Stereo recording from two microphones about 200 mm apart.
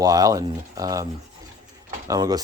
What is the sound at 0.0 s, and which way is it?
Speech, 15° right (ahead or behind).